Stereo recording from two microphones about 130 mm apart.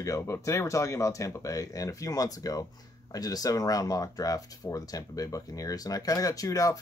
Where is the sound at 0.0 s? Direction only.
25° left (ahead or behind).